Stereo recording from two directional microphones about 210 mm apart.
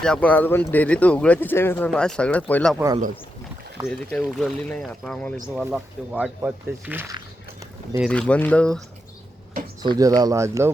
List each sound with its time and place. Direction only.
0.0 s speech: 5° left (ahead or behind)
2.7 s speech: 15° right (ahead or behind)
3.8 s speech: centre (ahead or behind)
8.1 s speech: 5° left (ahead or behind)
9.8 s speech: 20° right (ahead or behind)